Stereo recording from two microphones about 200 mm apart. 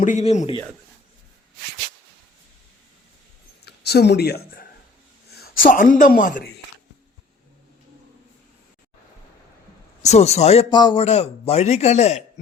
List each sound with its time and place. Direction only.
0.0 s speech: 35° left (ahead or behind)
3.6 s speech: 55° left (ahead or behind)
10.0 s speech: 35° left (ahead or behind)
11.0 s speech: 30° left (ahead or behind)